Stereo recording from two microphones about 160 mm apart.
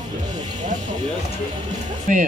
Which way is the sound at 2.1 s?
50° right (ahead or behind).